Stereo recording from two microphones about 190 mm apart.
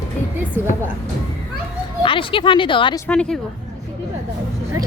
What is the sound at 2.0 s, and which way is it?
Speech, 25° left (ahead or behind).